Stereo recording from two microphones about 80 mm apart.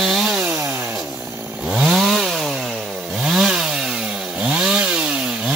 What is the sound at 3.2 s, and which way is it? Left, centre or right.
Chainsaw, centre.